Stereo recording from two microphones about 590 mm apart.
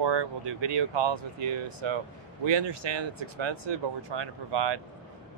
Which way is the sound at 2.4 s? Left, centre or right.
Right.